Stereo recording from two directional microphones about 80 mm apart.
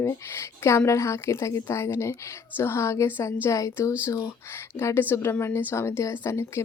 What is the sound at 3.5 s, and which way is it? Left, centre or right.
A woman's voice, left.